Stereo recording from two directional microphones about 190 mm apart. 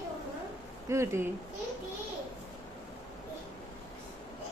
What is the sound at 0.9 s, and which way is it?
Speech, 15° right (ahead or behind).